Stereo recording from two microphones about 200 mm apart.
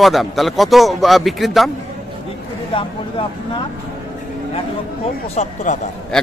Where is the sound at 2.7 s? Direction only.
25° left (ahead or behind).